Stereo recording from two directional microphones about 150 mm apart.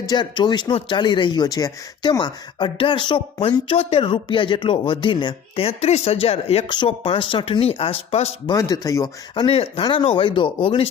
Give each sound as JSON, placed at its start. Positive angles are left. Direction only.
{"t": 0.0, "sound": "speech", "side_deg": 30}
{"t": 8.5, "sound": "speech", "side_deg": 25}
{"t": 9.3, "sound": "speech", "side_deg": 35}